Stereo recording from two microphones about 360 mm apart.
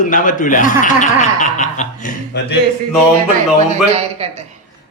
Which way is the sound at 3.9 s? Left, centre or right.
Centre.